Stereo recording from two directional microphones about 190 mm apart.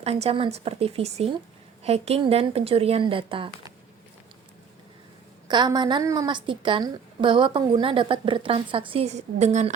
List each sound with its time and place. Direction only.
0.0 s speech: 35° right (ahead or behind)
5.5 s a woman's voice: 20° right (ahead or behind)